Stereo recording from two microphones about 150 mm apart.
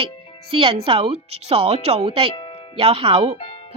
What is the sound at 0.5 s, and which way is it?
Speech, 35° right (ahead or behind).